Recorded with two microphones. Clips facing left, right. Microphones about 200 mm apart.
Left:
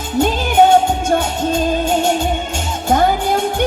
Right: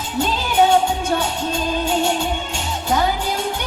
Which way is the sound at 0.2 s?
50° left (ahead or behind).